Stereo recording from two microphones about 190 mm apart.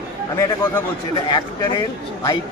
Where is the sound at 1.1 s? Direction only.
25° left (ahead or behind).